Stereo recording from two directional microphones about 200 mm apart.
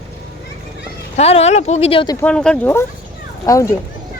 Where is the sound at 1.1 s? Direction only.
30° left (ahead or behind).